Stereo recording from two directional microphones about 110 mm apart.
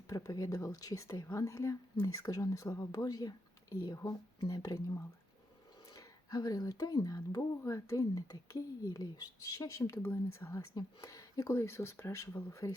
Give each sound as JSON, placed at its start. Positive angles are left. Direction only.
{"t": 0.1, "sound": "speech", "side_deg": 30}
{"t": 5.9, "sound": "speech", "side_deg": 35}
{"t": 9.7, "sound": "speech", "side_deg": 25}
{"t": 10.8, "sound": "speech", "side_deg": 30}